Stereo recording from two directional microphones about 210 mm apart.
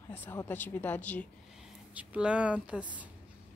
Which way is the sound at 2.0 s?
5° right (ahead or behind).